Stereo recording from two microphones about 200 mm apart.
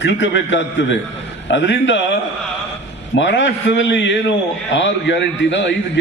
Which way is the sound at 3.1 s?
65° left (ahead or behind).